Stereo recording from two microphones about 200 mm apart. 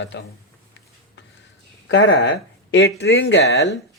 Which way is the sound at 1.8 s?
65° left (ahead or behind).